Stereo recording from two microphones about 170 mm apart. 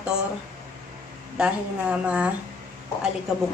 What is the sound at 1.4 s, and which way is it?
Speech, 5° right (ahead or behind).